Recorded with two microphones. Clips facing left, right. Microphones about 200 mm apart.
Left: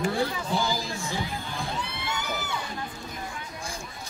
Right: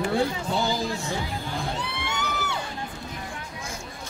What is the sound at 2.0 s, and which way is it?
Crowd, 70° right (ahead or behind).